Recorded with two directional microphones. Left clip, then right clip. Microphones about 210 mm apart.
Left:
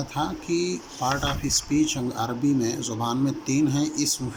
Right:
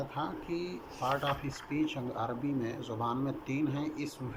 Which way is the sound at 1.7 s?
80° left.